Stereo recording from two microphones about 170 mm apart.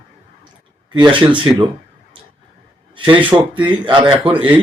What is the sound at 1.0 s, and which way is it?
Speech, 30° right (ahead or behind).